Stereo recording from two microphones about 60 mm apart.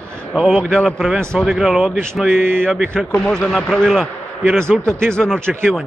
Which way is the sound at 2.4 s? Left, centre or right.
Right.